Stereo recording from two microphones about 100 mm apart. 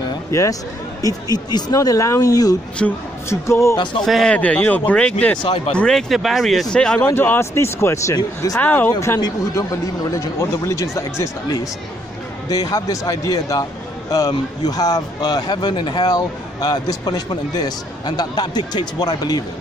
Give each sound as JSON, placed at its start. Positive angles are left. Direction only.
{"t": 0.3, "sound": "speech", "side_deg": 30}
{"t": 2.8, "sound": "speech", "side_deg": 10}
{"t": 3.3, "sound": "speech", "side_deg": 30}
{"t": 3.7, "sound": "a man's voice", "side_deg": 55}
{"t": 4.0, "sound": "speech", "side_deg": 5}
{"t": 5.4, "sound": "a man's voice", "side_deg": 50}
{"t": 5.8, "sound": "speech", "side_deg": 5}
{"t": 7.2, "sound": "speech", "side_deg": 25}
{"t": 8.5, "sound": "speech", "side_deg": 20}
{"t": 9.5, "sound": "a man's voice", "side_deg": 30}